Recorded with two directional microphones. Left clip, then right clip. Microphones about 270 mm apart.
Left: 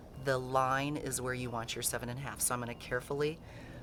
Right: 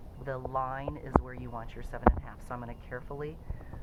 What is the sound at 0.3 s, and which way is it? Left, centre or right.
Speech, left.